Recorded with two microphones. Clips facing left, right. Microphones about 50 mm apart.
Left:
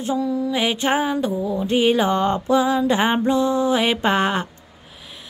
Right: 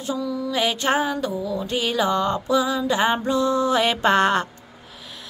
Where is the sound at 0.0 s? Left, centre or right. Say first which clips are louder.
Left 4 dB; left.